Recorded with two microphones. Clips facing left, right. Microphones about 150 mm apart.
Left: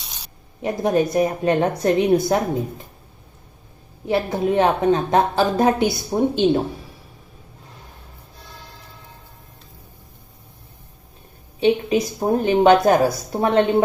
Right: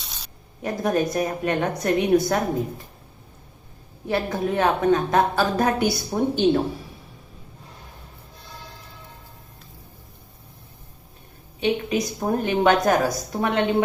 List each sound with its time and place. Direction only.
0.6 s a woman's voice: 25° left (ahead or behind)
4.0 s a woman's voice: 20° left (ahead or behind)
11.6 s a woman's voice: 30° left (ahead or behind)